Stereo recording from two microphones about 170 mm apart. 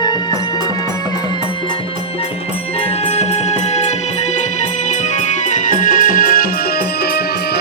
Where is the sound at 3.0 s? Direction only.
40° left (ahead or behind); by 6.5 s 55° left (ahead or behind).